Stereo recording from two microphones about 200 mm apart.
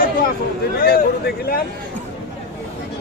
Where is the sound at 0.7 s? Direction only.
55° left (ahead or behind).